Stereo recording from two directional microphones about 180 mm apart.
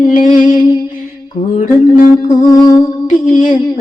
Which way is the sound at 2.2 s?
25° left (ahead or behind).